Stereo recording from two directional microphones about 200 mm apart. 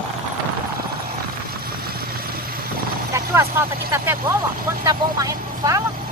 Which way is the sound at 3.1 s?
15° right (ahead or behind).